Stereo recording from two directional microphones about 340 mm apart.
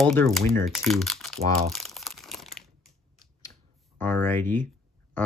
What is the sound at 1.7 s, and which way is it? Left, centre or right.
Crumpling, centre.